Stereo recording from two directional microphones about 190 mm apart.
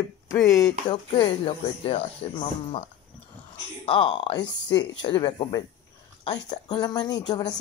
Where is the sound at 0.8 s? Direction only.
25° left (ahead or behind).